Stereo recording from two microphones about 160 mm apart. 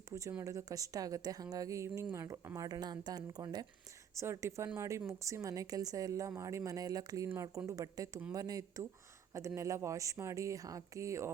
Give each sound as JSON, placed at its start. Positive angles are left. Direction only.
{"t": 0.1, "sound": "speech", "side_deg": -20}